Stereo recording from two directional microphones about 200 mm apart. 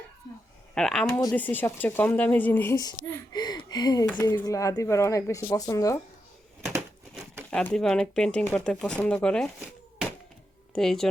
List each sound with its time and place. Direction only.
0.7 s speech: 5° left (ahead or behind)
3.3 s a sound: 20° left (ahead or behind)
4.1 s speech: 10° left (ahead or behind)
6.7 s a sound: 10° right (ahead or behind)
7.5 s speech: 5° left (ahead or behind)
10.7 s speech: centre (ahead or behind)